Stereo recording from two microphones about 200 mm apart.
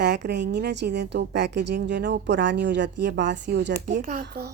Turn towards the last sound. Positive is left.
turn(degrees=-55)  # may be behind; listen again after turning